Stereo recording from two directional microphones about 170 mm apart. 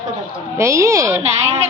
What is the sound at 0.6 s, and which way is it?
Speech, 20° right (ahead or behind).